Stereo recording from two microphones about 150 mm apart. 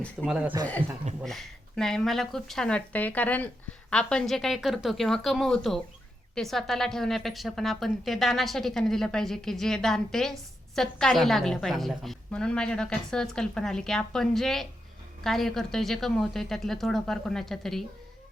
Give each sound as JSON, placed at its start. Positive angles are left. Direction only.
{"t": 0.3, "sound": "a man's voice", "side_deg": -10}
{"t": 1.2, "sound": "speech", "side_deg": 0}